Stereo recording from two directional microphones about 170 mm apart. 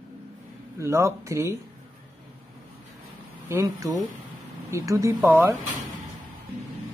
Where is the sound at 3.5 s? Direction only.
20° right (ahead or behind).